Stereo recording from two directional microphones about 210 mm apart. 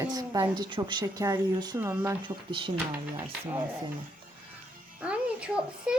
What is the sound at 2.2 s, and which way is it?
Speech, 25° right (ahead or behind).